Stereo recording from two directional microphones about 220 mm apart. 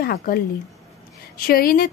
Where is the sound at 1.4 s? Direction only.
40° left (ahead or behind).